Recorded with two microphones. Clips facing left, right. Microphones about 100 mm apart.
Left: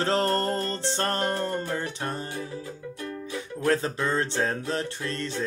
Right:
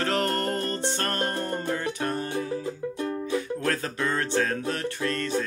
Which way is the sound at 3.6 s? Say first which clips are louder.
Left 3 dB; 25° left (ahead or behind).